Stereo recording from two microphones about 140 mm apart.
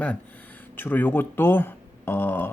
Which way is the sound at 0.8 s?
15° left (ahead or behind).